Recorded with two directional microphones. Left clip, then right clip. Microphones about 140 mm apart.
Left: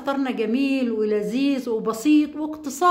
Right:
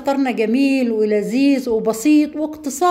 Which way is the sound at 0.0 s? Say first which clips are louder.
Right 6 dB; 30° right (ahead or behind).